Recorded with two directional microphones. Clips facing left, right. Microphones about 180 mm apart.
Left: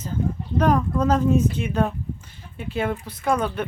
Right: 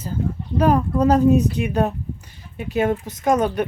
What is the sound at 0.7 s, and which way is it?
Speech, 35° right (ahead or behind).